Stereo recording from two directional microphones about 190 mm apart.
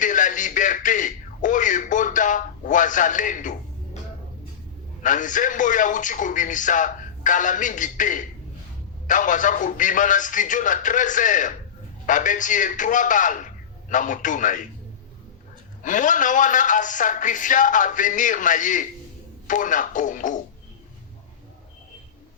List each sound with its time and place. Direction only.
0.0 s radio: 40° left (ahead or behind)
5.0 s a man's voice: 40° left (ahead or behind)
15.8 s a man's voice: 45° left (ahead or behind)